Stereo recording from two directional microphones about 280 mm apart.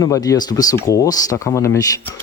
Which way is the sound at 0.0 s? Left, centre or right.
Centre.